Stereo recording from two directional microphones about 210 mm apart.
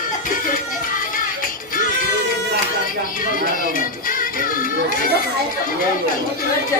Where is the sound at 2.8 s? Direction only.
40° left (ahead or behind).